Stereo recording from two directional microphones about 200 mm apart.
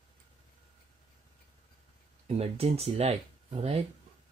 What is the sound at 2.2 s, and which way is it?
Speech, 30° right (ahead or behind).